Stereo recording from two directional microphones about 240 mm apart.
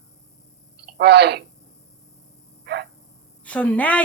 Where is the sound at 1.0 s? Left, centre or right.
Right.